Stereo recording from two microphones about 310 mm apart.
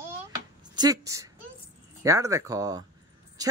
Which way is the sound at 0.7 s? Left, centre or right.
Centre.